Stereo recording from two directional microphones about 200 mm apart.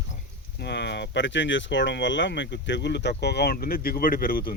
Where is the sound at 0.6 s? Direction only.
55° left (ahead or behind).